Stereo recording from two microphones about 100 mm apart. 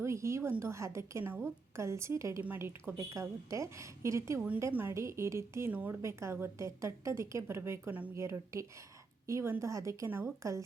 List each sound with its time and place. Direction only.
0.0 s a woman's voice: 30° right (ahead or behind)
8.1 s a woman's voice: 30° right (ahead or behind)